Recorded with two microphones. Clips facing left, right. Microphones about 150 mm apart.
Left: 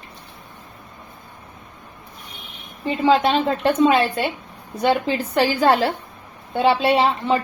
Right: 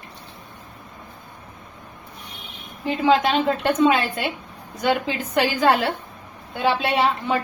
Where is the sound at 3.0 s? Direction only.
35° left (ahead or behind).